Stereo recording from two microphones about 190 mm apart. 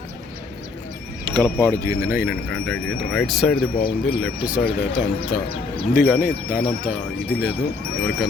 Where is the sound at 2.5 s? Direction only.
5° left (ahead or behind).